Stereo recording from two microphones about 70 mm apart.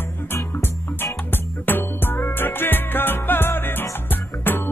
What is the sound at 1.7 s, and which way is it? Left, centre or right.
Music, left.